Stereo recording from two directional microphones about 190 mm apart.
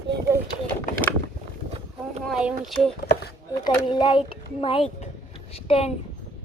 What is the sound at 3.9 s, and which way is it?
Speech, 25° left (ahead or behind).